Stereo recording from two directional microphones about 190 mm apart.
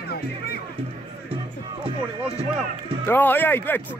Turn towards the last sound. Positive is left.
turn(degrees=10)  # may be behind; listen again after turning